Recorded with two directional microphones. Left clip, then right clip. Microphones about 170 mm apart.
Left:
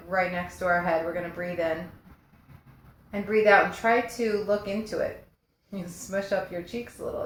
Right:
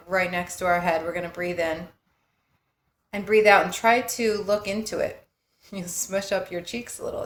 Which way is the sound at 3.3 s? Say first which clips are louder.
Right 3 dB; 35° right (ahead or behind).